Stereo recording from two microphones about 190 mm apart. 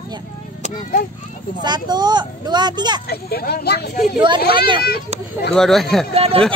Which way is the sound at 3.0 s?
55° left (ahead or behind).